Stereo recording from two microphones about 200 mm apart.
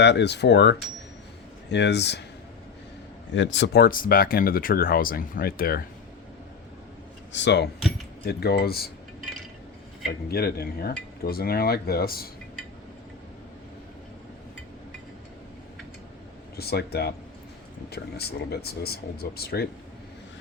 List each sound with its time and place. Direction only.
0.0 s speech: 60° left (ahead or behind)
3.3 s speech: 65° left (ahead or behind); by 5.8 s 50° left (ahead or behind)
7.3 s speech: 60° left (ahead or behind)
10.1 s speech: 50° left (ahead or behind)
16.6 s speech: 50° left (ahead or behind)